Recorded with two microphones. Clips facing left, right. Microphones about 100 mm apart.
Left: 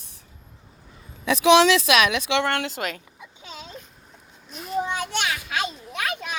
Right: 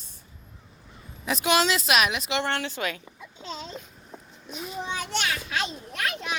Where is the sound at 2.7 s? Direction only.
45° left (ahead or behind).